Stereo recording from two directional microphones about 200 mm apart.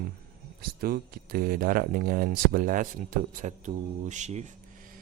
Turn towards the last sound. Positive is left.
turn(degrees=-35)  # may be behind; listen again after turning